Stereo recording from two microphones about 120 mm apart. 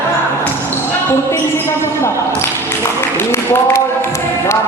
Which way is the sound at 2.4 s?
20° left (ahead or behind).